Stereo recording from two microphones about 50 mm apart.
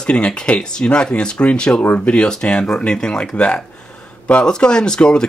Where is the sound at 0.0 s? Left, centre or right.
Centre.